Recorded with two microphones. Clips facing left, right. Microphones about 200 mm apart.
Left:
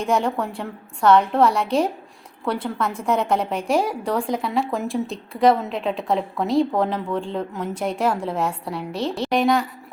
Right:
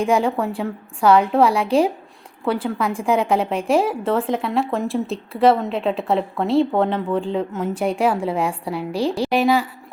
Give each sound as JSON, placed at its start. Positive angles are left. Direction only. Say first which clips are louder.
{"t": 0.0, "sound": "a woman's voice", "louder": "right 3 dB", "side_deg": -10}
{"t": 8.9, "sound": "a woman's voice", "louder": "right 4 dB", "side_deg": -30}
{"t": 9.1, "sound": "a woman's voice", "louder": "even", "side_deg": -5}